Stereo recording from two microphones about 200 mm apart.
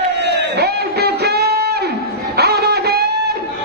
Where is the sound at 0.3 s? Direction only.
55° right (ahead or behind).